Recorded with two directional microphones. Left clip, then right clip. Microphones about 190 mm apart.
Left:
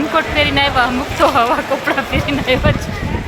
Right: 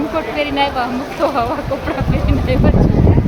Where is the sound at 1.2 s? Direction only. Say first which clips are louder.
Left 4 dB; 20° left (ahead or behind).